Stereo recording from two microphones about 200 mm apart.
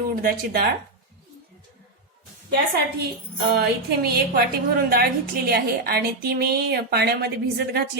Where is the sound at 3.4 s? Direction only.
55° right (ahead or behind).